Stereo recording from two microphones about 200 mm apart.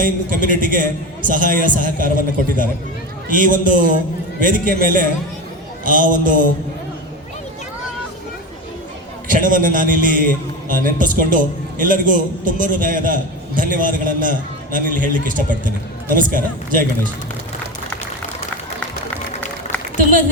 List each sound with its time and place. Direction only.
0.0 s a man's voice: 40° right (ahead or behind)
3.2 s a man's voice: 45° right (ahead or behind)
9.2 s a man's voice: 40° right (ahead or behind)
20.0 s a man's voice: 40° right (ahead or behind)